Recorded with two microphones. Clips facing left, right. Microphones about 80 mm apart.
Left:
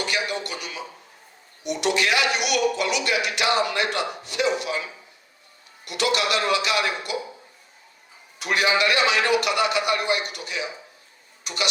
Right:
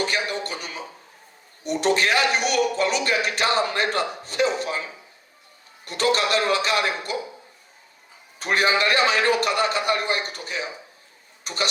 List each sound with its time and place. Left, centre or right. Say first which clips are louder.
0.0 s a sound: right 1 dB; right
1.6 s a man's voice: right 2 dB; right
8.4 s a man's voice: right 1 dB; right
11.4 s tick-tock: right 1 dB; right